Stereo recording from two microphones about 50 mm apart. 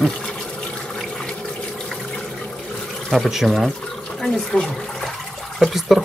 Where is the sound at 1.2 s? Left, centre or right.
Centre.